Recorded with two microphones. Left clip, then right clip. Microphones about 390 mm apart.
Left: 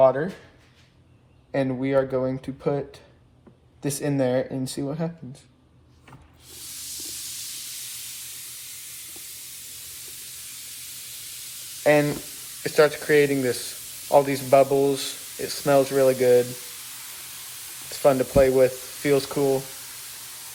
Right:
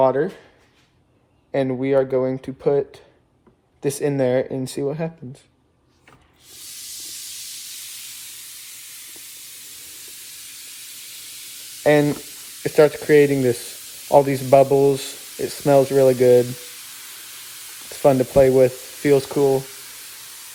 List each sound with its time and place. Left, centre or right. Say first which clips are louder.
0.0 s speech: right 1 dB; right
1.5 s speech: right 4 dB; right
11.8 s speech: right 3 dB; right
18.0 s speech: right 4 dB; right